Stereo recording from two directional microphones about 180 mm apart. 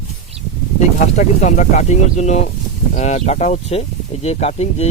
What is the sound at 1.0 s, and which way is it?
Speech, 45° left (ahead or behind).